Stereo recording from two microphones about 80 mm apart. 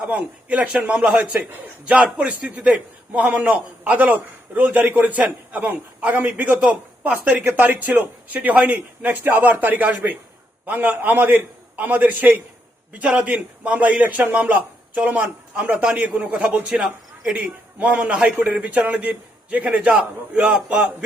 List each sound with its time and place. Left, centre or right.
0.0 s a man's voice: centre
17.3 s a man's voice: centre